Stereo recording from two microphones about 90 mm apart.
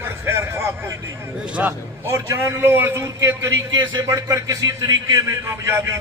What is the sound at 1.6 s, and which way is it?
Speech, 20° right (ahead or behind).